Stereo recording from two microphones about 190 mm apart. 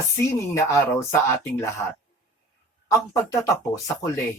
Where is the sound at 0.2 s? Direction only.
15° left (ahead or behind).